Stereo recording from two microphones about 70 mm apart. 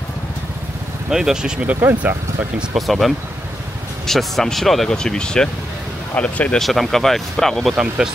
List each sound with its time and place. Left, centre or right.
1.1 s speech: centre
1.8 s speech: right
2.7 s speech: centre
6.6 s speech: centre
7.7 s speech: centre